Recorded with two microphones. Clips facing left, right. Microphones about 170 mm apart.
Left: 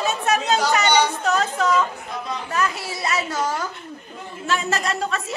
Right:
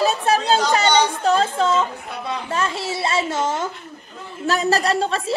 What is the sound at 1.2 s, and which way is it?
Music, 30° right (ahead or behind).